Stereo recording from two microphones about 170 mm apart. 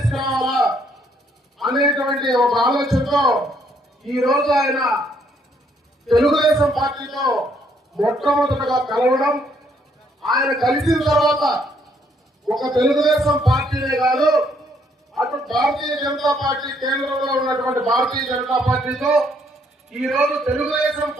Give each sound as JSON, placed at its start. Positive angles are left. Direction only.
{"t": 0.0, "sound": "a sound", "side_deg": 0}
{"t": 1.5, "sound": "a man's voice", "side_deg": 0}
{"t": 6.1, "sound": "a man's voice", "side_deg": 0}
{"t": 12.8, "sound": "a man's voice", "side_deg": 0}